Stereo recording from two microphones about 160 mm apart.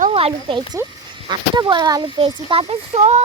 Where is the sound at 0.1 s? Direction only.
35° right (ahead or behind).